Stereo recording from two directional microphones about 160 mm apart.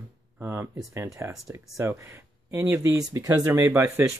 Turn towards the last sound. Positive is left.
turn(degrees=-15)  # may be behind; listen again after turning